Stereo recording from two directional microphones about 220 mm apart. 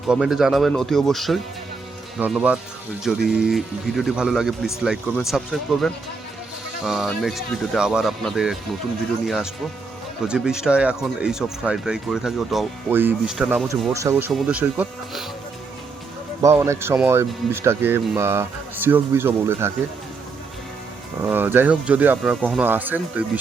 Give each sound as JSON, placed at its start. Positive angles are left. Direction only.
{"t": 0.1, "sound": "speech", "side_deg": -5}
{"t": 13.9, "sound": "speech", "side_deg": -10}
{"t": 16.4, "sound": "speech", "side_deg": -10}
{"t": 21.2, "sound": "speech", "side_deg": -10}